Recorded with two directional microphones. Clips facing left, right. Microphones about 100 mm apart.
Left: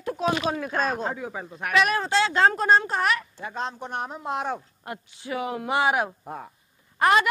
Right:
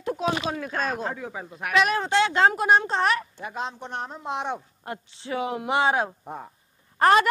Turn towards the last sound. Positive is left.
turn(degrees=-40)  # may be behind; listen again after turning